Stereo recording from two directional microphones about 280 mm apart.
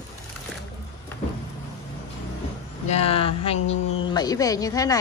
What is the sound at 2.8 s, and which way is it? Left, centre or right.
Speech, left.